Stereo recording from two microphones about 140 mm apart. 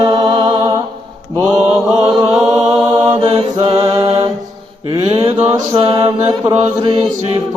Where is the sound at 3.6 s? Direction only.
45° right (ahead or behind).